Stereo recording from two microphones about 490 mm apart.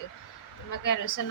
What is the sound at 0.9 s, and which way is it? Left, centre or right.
Speech, left.